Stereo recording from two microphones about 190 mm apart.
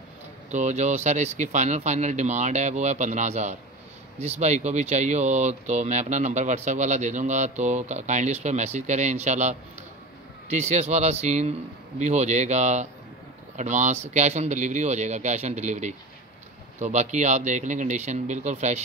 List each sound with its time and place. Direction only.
0.5 s speech: 40° right (ahead or behind)